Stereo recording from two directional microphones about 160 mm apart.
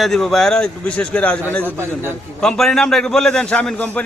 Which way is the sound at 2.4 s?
Centre (ahead or behind).